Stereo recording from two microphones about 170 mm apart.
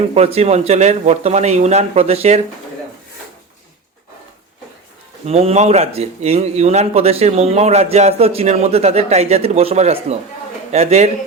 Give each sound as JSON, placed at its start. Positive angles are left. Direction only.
{"t": 0.1, "sound": "a man's voice", "side_deg": -35}
{"t": 5.2, "sound": "a man's voice", "side_deg": -35}